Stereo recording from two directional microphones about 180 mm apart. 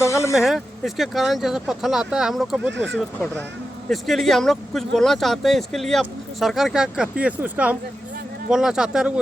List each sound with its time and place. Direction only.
0.1 s speech: 15° left (ahead or behind)
0.3 s speech: centre (ahead or behind)